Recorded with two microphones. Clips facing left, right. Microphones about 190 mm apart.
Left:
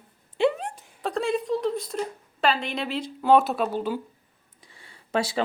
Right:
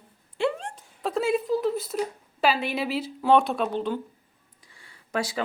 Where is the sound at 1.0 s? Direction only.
5° right (ahead or behind).